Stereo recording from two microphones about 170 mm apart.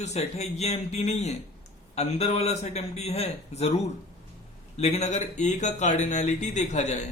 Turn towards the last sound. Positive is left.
turn(degrees=45)  # may be behind; listen again after turning